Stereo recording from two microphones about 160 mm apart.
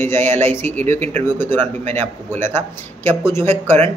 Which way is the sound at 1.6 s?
45° right (ahead or behind).